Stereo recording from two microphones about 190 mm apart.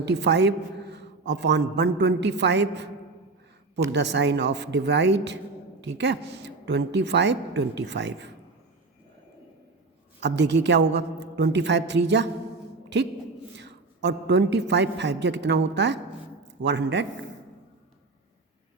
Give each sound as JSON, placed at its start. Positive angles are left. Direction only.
{"t": 0.0, "sound": "a woman's voice", "side_deg": -65}
{"t": 3.9, "sound": "a woman's voice", "side_deg": -65}
{"t": 10.2, "sound": "a woman's voice", "side_deg": -65}